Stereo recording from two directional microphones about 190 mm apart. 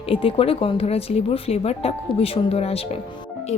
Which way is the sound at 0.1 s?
30° left (ahead or behind).